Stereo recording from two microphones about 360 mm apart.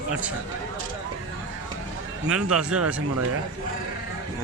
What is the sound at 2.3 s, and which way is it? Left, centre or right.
Speech, centre.